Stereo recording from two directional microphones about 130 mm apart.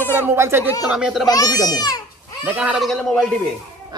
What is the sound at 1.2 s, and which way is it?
Speech, 30° left (ahead or behind).